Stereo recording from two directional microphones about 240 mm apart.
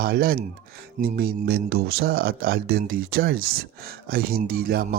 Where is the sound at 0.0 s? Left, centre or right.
Right.